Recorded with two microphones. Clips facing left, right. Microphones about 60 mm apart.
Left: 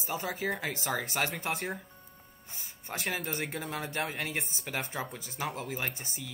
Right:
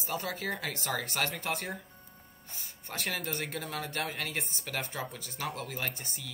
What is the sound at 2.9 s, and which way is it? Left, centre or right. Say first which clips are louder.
Speech: left 1 dB; centre.